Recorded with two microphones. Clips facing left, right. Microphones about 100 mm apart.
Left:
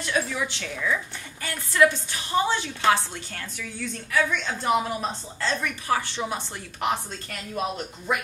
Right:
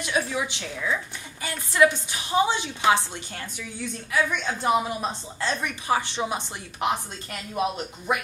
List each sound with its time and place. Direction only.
0.0 s a woman's voice: 20° right (ahead or behind)